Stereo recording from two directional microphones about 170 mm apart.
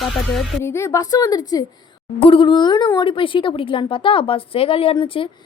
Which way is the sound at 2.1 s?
35° left (ahead or behind).